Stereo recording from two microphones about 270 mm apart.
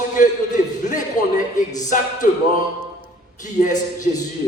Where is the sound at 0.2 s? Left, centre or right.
Left.